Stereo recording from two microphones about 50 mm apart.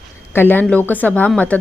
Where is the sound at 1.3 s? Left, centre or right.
Left.